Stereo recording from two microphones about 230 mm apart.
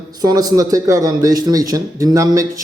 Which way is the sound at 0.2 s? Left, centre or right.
Centre.